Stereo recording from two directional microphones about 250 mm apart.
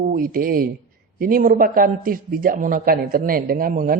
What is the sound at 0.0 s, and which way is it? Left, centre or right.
A man's voice, right.